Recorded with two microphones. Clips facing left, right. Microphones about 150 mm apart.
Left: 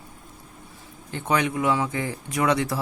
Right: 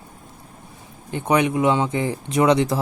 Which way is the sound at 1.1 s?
15° right (ahead or behind).